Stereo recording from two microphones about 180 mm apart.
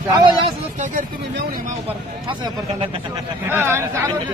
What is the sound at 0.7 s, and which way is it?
Speech, 40° right (ahead or behind).